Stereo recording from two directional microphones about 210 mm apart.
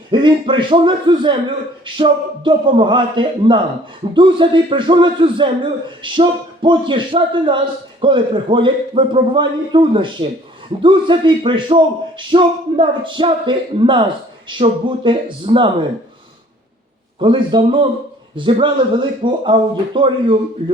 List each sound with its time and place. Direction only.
0.1 s a man's voice: 20° right (ahead or behind)
17.2 s a man's voice: 20° right (ahead or behind)